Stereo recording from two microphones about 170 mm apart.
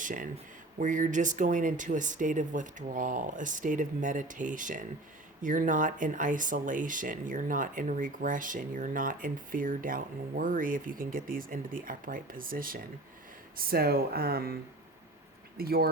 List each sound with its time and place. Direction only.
0.0 s speech: 50° right (ahead or behind)
15.5 s speech: 65° right (ahead or behind)